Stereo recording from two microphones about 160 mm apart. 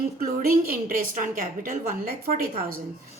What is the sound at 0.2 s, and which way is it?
A woman's voice, 65° right (ahead or behind).